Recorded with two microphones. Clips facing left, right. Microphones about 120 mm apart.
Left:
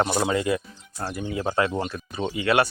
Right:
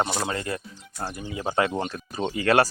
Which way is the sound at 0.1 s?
15° left (ahead or behind).